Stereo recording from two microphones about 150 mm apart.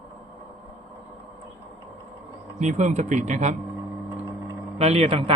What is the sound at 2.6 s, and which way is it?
Speech, 50° right (ahead or behind).